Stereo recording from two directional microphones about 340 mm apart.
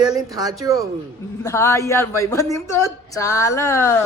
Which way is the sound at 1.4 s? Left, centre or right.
Centre.